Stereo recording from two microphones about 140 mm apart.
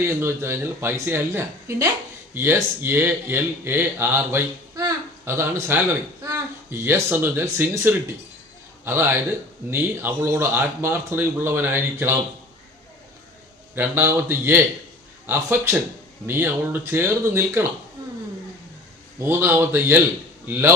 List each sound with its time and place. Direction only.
0.0 s a man's voice: 15° right (ahead or behind)
13.7 s speech: 15° right (ahead or behind)
19.2 s speech: 15° right (ahead or behind)